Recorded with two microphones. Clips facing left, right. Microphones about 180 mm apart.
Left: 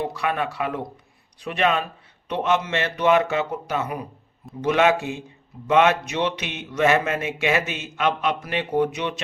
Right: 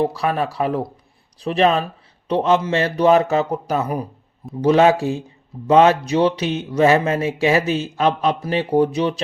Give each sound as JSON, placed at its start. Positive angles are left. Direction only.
{"t": 0.0, "sound": "speech", "side_deg": -35}